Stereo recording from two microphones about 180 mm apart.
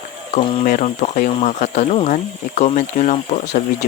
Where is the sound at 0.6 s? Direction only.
45° left (ahead or behind).